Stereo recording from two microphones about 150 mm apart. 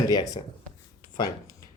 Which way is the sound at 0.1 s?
25° left (ahead or behind).